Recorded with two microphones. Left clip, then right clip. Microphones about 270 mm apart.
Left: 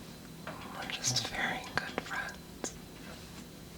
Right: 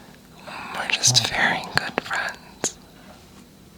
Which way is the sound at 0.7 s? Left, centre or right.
Right.